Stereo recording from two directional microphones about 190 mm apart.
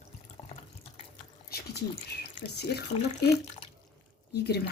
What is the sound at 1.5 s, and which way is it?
Drip, 55° left (ahead or behind).